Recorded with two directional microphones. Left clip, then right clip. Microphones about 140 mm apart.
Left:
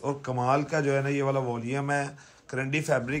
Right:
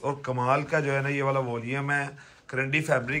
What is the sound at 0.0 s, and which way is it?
A man's voice, 15° left (ahead or behind).